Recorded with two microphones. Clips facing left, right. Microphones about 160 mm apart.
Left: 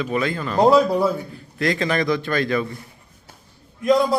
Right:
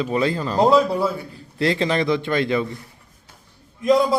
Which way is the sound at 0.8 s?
10° left (ahead or behind).